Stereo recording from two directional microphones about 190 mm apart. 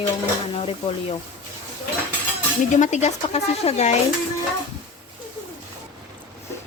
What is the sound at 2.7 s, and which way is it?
Speech, 40° left (ahead or behind).